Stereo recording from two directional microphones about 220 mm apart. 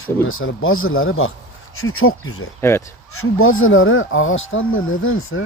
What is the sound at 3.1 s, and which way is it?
Speech, 70° left (ahead or behind).